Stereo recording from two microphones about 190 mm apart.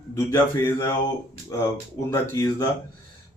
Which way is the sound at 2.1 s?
20° left (ahead or behind).